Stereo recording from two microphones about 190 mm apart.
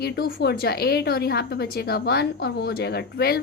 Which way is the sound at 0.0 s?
55° left (ahead or behind).